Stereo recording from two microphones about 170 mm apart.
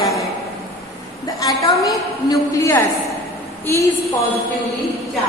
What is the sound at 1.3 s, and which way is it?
A woman's voice, 20° left (ahead or behind).